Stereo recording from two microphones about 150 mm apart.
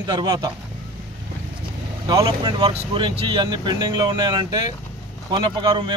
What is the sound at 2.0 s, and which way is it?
Speech, 30° right (ahead or behind).